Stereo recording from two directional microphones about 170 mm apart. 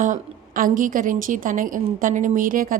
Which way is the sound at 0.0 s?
50° right (ahead or behind).